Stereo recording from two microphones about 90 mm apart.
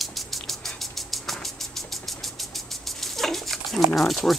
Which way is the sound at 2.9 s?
5° left (ahead or behind).